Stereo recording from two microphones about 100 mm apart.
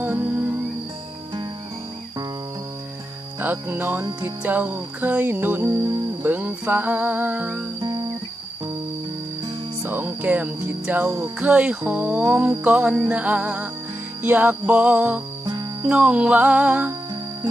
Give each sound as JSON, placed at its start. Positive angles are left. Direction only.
{"t": 0.0, "sound": "music", "side_deg": -20}
{"t": 3.3, "sound": "music", "side_deg": -20}
{"t": 7.8, "sound": "guitar", "side_deg": -45}
{"t": 9.8, "sound": "music", "side_deg": -20}